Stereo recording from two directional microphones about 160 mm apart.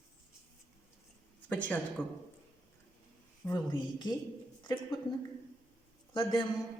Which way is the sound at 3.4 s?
20° left (ahead or behind).